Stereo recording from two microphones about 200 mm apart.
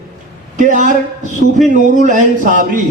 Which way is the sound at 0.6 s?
40° right (ahead or behind).